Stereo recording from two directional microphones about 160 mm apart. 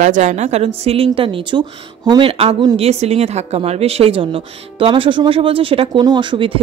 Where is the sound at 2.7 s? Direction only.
40° right (ahead or behind).